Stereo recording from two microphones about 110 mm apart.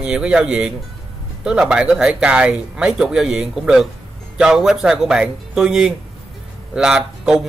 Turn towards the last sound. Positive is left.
turn(degrees=-5)  # may be behind; listen again after turning